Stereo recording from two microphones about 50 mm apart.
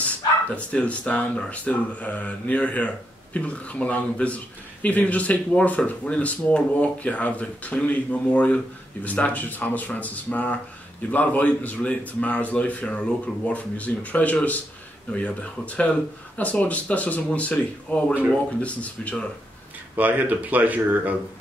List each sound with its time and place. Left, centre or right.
0.0 s speech: left
20.0 s speech: right